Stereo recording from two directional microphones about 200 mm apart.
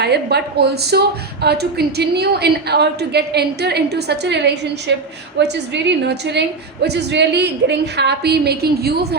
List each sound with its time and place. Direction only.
0.0 s a woman's voice: 55° right (ahead or behind)